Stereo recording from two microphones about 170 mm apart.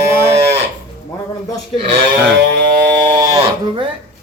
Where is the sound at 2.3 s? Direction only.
75° right (ahead or behind).